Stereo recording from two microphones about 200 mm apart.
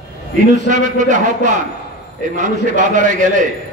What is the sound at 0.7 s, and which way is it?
A man's voice, 40° right (ahead or behind).